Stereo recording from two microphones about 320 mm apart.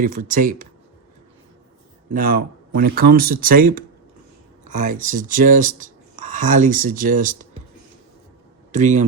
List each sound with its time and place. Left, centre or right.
0.0 s speech: right
2.0 s speech: right
8.7 s speech: right